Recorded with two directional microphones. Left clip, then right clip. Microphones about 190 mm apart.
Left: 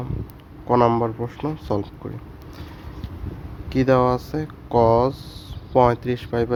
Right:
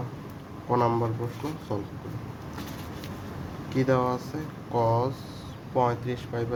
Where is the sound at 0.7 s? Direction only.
55° left (ahead or behind).